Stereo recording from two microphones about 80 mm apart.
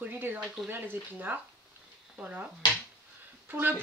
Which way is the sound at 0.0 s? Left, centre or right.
Right.